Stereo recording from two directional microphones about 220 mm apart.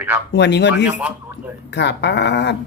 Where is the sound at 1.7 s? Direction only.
50° left (ahead or behind).